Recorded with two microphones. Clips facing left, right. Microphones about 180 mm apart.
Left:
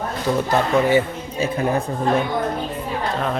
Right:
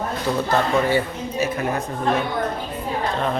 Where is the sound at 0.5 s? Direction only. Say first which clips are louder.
Left 3 dB; 15° left (ahead or behind).